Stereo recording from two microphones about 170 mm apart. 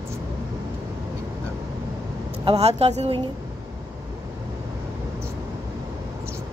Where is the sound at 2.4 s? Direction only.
35° right (ahead or behind).